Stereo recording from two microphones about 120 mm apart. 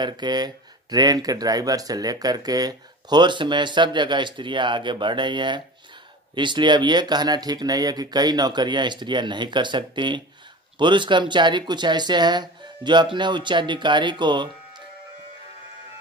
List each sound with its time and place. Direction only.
0.0 s speech: 35° right (ahead or behind)